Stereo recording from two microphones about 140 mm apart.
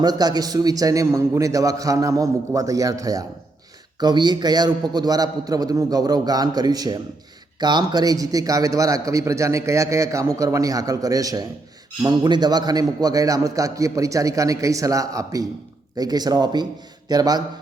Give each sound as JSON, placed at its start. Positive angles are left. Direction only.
{"t": 0.0, "sound": "a man's voice", "side_deg": -30}